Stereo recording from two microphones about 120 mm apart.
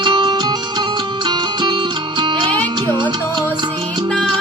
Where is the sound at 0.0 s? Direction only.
45° right (ahead or behind).